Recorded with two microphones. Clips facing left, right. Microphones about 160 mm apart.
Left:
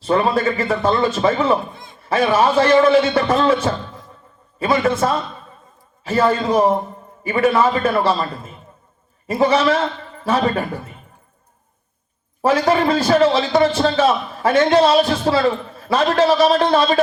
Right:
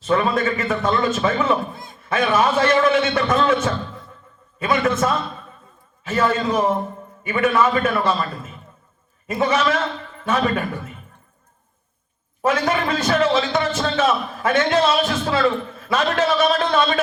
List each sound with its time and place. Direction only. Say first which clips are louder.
0.0 s a man's voice: left 2 dB; 35° left (ahead or behind)
12.4 s a man's voice: left 4 dB; 30° left (ahead or behind)